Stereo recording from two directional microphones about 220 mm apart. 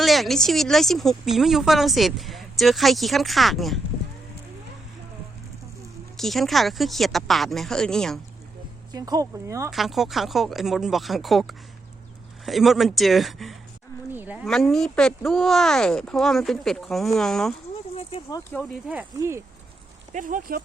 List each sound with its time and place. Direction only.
0.0 s speech: centre (ahead or behind)
6.1 s speech: centre (ahead or behind)
8.9 s speech: 15° right (ahead or behind)
9.6 s speech: centre (ahead or behind)
17.9 s a sound: 25° left (ahead or behind)
18.9 s speech: 10° right (ahead or behind)
20.1 s speech: 35° right (ahead or behind)